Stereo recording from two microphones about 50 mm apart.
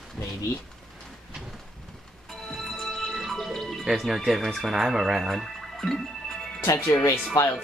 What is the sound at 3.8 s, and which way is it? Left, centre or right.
Speech, centre.